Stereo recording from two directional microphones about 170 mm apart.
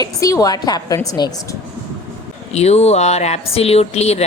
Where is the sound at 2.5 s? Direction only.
40° left (ahead or behind).